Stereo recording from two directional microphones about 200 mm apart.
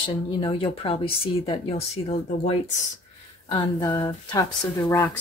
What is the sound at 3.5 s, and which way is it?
Speech, 20° left (ahead or behind).